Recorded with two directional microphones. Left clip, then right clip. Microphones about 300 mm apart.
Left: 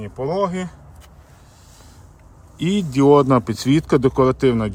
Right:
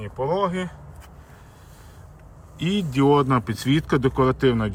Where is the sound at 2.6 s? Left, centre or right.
Centre.